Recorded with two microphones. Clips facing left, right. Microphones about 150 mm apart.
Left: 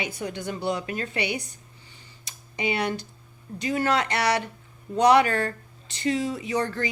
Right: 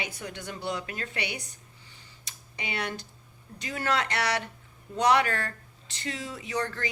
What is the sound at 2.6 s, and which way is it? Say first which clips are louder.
Speech: left 7 dB; 15° left (ahead or behind).